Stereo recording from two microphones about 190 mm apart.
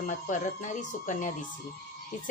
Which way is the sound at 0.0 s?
40° left (ahead or behind).